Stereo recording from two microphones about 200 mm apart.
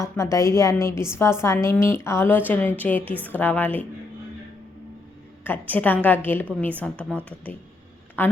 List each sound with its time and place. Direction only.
0.0 s a woman's voice: 15° left (ahead or behind)
5.4 s a woman's voice: 10° left (ahead or behind)